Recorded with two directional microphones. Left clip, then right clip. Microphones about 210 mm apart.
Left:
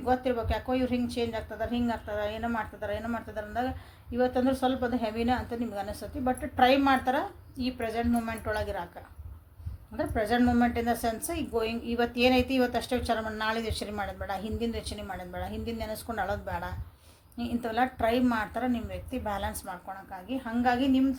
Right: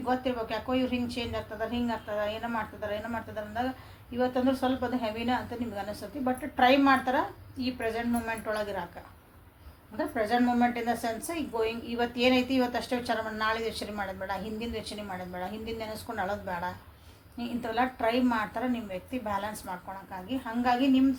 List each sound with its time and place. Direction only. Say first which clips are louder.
0.0 s a woman's voice: left 2 dB; 50° left (ahead or behind)
10.0 s a woman's voice: even; 50° left (ahead or behind)